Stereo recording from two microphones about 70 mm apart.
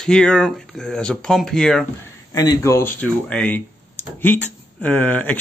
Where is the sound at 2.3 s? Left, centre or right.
Left.